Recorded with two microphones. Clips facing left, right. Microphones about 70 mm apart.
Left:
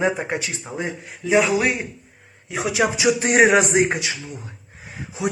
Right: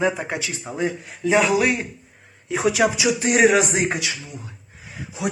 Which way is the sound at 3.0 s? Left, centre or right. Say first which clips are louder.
Left 3 dB; left.